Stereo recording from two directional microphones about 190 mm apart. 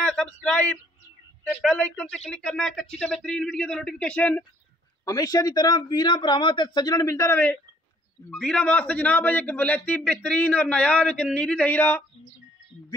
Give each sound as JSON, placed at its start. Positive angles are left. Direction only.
{"t": 0.0, "sound": "a sound", "side_deg": 5}
{"t": 1.4, "sound": "speech", "side_deg": 0}
{"t": 5.0, "sound": "a man's voice", "side_deg": 20}